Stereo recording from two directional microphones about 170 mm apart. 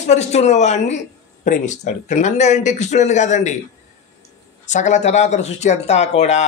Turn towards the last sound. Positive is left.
turn(degrees=40)  # may be behind; listen again after turning